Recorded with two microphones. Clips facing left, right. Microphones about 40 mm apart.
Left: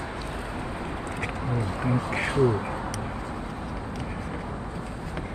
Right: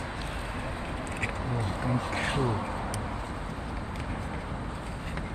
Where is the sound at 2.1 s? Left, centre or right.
Left.